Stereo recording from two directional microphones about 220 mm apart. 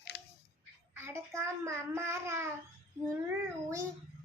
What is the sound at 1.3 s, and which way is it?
Child singing, 10° right (ahead or behind).